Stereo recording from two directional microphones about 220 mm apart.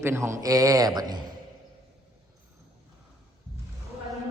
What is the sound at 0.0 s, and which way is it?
A man's voice, 10° right (ahead or behind).